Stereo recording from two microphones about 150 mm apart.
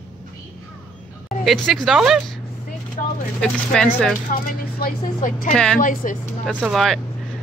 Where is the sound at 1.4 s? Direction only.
Centre (ahead or behind).